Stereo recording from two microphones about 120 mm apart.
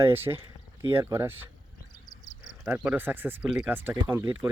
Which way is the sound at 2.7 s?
10° right (ahead or behind).